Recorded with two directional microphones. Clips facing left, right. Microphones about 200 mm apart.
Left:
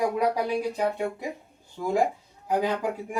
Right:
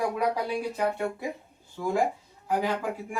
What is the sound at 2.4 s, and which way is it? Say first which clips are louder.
Speech: left 2 dB; 15° left (ahead or behind).